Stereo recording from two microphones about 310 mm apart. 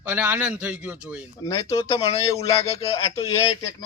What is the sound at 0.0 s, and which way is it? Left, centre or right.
A man's voice, centre.